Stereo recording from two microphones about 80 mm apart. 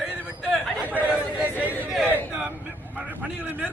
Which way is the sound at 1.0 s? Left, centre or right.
Centre.